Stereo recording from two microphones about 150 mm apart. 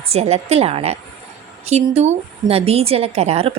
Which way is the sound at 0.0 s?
45° right (ahead or behind).